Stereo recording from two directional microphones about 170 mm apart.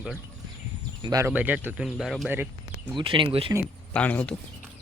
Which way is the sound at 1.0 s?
20° right (ahead or behind).